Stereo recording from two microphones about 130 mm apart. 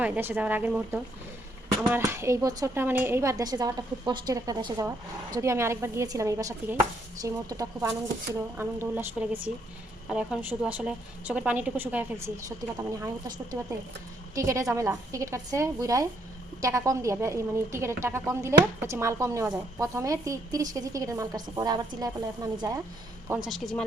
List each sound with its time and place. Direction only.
0.0 s a woman's voice: 15° right (ahead or behind)
2.0 s a woman's voice: 20° right (ahead or behind)
2.8 s a woman's voice: 15° right (ahead or behind); by 22.8 s 30° right (ahead or behind)
23.4 s speech: centre (ahead or behind)